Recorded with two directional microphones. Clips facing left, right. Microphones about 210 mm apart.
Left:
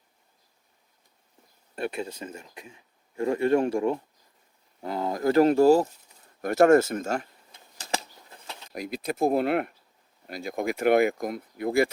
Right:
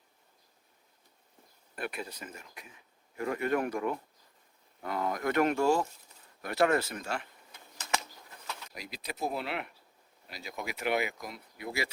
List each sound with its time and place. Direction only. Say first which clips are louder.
1.7 s speech: left 7 dB; 25° left (ahead or behind); by 7.3 s 45° left (ahead or behind)
7.8 s typing: left 3 dB; 35° left (ahead or behind)
8.7 s speech: left 15 dB; 50° left (ahead or behind)